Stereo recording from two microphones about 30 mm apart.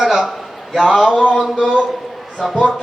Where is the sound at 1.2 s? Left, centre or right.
Right.